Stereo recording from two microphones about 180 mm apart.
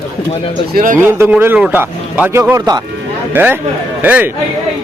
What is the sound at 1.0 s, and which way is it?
A man's voice, 10° right (ahead or behind).